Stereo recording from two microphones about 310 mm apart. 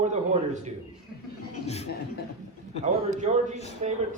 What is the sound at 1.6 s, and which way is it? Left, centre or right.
Speech, left.